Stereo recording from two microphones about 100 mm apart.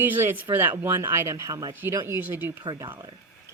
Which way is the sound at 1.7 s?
25° right (ahead or behind).